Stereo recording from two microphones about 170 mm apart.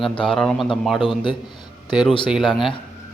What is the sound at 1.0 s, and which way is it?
Speech, 30° left (ahead or behind).